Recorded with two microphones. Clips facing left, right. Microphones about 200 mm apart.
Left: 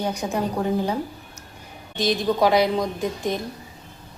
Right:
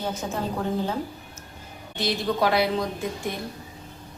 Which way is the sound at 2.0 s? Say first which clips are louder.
Left 4 dB; 15° left (ahead or behind).